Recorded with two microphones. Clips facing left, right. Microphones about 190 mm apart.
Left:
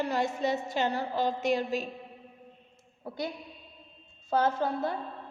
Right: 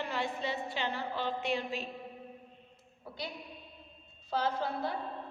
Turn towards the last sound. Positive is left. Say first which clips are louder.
# left 5 dB
turn(degrees=45)  # may be behind; listen again after turning